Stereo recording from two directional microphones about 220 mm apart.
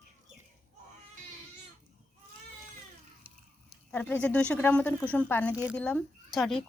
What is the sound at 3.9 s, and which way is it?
Speech, 5° left (ahead or behind).